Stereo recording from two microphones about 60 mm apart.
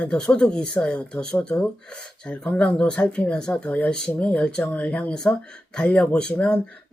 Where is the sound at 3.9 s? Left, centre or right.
Centre.